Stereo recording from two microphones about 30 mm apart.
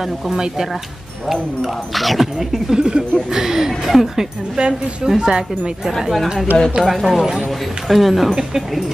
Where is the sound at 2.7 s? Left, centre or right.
Right; by 4.3 s centre.